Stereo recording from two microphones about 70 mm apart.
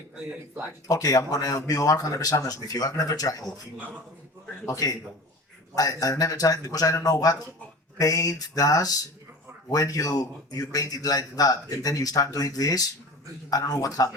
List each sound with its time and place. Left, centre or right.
0.9 s speech: left
4.6 s a man's voice: left